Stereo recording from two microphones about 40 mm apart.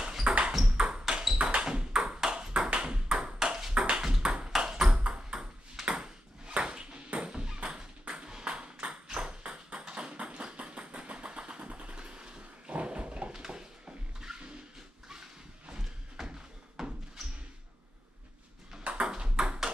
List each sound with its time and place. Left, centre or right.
0.2 s ping: right
0.5 s ping: centre
1.4 s a sound: right
2.1 s ping: centre
3.7 s ping: right
4.0 s ping: centre
4.9 s ping: right
7.2 s music: right
8.2 s ping: right
8.8 s a sound: right
13.3 s a sound: centre
16.2 s a sound: centre
18.9 s ping: right